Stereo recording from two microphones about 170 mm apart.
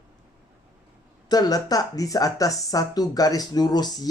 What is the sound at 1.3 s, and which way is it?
Speech, 25° left (ahead or behind).